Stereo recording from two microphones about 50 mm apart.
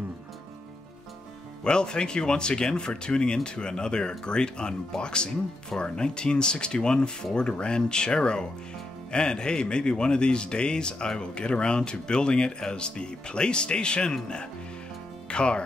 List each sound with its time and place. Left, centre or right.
1.6 s speech: centre
15.2 s music: left